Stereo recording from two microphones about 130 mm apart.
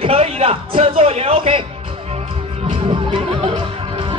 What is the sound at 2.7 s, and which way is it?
Music, 45° right (ahead or behind).